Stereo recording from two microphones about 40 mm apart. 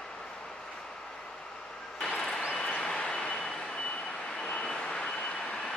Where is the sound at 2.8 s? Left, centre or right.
Left.